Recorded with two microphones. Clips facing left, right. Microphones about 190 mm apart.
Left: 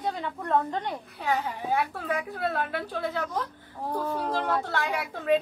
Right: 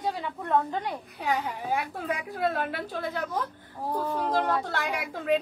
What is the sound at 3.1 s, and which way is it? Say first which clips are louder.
Speech: even; 50° right (ahead or behind).